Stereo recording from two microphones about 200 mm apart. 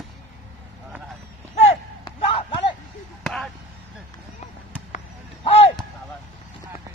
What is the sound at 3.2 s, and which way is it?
Speech, centre (ahead or behind).